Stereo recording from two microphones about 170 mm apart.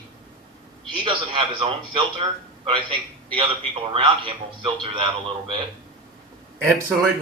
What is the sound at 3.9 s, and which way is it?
A man's voice, 30° right (ahead or behind).